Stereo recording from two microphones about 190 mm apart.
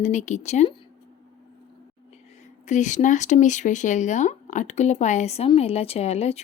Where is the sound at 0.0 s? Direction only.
40° left (ahead or behind).